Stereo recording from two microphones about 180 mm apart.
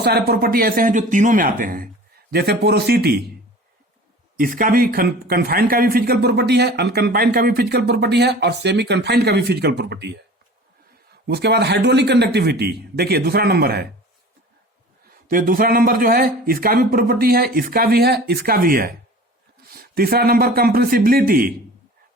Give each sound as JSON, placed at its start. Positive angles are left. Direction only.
{"t": 0.0, "sound": "speech", "side_deg": -60}
{"t": 2.3, "sound": "a man's voice", "side_deg": -65}
{"t": 4.4, "sound": "a man's voice", "side_deg": -50}
{"t": 11.3, "sound": "a man's voice", "side_deg": -65}
{"t": 15.3, "sound": "a man's voice", "side_deg": -50}